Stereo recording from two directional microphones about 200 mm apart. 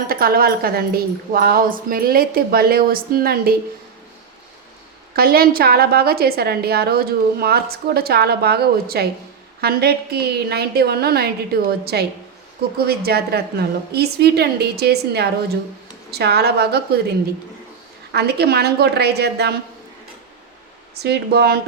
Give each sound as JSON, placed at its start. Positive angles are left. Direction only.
{"t": 0.1, "sound": "a woman's voice", "side_deg": -50}
{"t": 5.1, "sound": "a woman's voice", "side_deg": -50}
{"t": 18.1, "sound": "a woman's voice", "side_deg": -55}
{"t": 21.0, "sound": "a woman's voice", "side_deg": -55}